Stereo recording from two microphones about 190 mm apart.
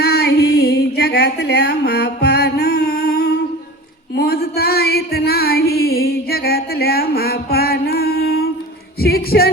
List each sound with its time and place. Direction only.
0.0 s music: 60° left (ahead or behind)
4.1 s a sound: 55° left (ahead or behind)
9.0 s music: 55° left (ahead or behind)